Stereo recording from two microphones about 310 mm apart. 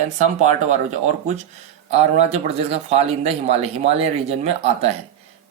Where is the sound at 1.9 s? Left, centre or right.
Right.